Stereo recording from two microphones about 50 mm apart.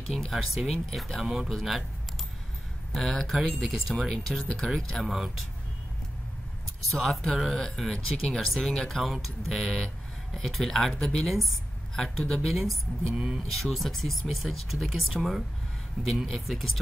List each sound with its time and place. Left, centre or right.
0.1 s speech: centre
1.2 s speech: centre
1.5 s speech: centre
2.9 s speech: centre
6.9 s speech: centre
11.2 s speech: centre
13.1 s speech: centre
13.5 s speech: centre